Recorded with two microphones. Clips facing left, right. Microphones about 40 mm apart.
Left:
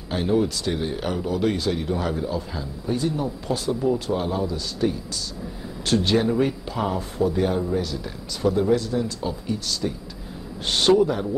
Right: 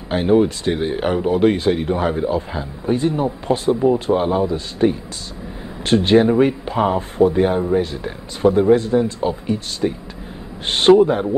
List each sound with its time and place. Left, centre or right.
0.1 s speech: right